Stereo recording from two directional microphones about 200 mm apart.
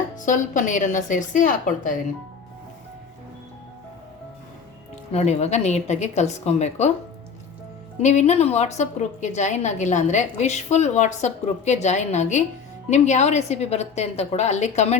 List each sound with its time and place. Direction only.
0.3 s a woman's voice: 40° left (ahead or behind)
5.1 s a woman's voice: 35° left (ahead or behind)
8.0 s a woman's voice: 35° left (ahead or behind)